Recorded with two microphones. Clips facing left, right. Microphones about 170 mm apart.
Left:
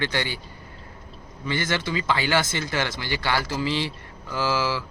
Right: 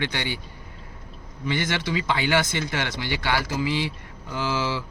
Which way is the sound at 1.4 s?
15° right (ahead or behind).